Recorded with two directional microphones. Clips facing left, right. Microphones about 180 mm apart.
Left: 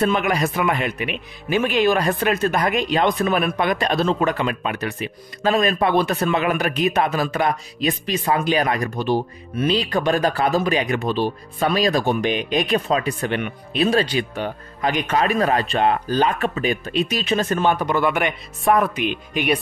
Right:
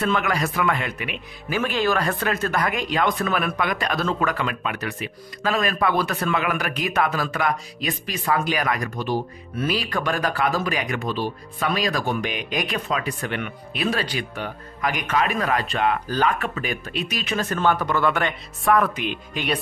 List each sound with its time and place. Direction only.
0.0 s speech: 20° left (ahead or behind)